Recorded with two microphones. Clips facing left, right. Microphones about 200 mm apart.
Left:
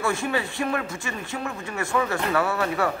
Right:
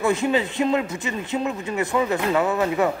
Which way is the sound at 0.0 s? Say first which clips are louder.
Right 5 dB; 20° right (ahead or behind).